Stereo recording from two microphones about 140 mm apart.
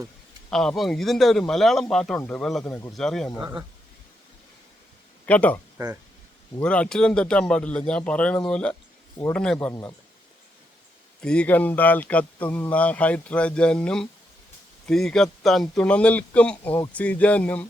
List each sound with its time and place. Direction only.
0.5 s speech: 5° left (ahead or behind)
2.6 s speech: 15° left (ahead or behind)
2.9 s speech: 5° left (ahead or behind)
5.2 s a man's voice: 10° left (ahead or behind)
5.7 s speech: 25° right (ahead or behind)
6.6 s speech: 10° left (ahead or behind)
11.2 s speech: 5° left (ahead or behind)